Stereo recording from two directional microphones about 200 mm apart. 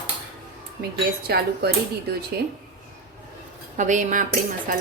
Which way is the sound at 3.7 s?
40° right (ahead or behind).